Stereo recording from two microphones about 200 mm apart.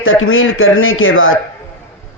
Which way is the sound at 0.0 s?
85° left.